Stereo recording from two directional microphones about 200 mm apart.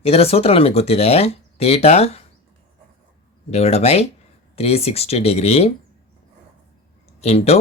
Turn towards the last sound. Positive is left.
turn(degrees=30)  # may be behind; listen again after turning